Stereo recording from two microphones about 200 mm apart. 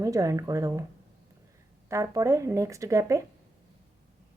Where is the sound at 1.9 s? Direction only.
15° right (ahead or behind).